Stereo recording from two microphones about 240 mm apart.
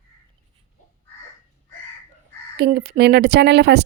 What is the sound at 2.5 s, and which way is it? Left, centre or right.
A woman's voice, right.